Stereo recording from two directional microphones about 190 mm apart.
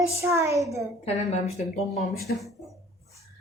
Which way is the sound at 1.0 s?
35° left (ahead or behind).